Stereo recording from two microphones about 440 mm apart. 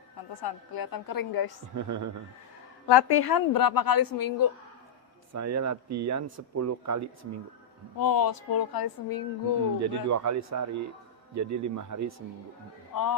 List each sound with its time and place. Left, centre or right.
0.4 s a woman's voice: left
1.7 s speech: right
2.8 s a woman's voice: left
5.3 s speech: right
7.9 s a woman's voice: left
9.8 s speech: right
12.9 s a man's voice: left